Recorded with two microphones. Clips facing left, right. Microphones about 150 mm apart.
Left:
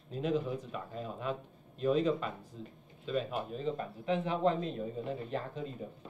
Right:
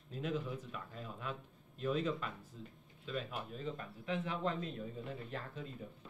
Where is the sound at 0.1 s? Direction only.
25° left (ahead or behind).